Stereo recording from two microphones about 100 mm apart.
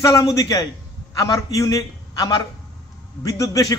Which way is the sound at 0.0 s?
35° left (ahead or behind).